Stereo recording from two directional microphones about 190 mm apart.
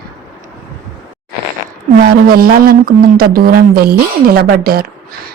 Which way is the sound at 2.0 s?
50° right (ahead or behind).